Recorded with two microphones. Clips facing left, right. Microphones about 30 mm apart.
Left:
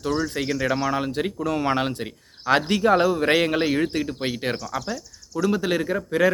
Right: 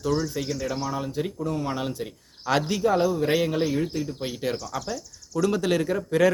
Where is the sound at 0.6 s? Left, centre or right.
Left.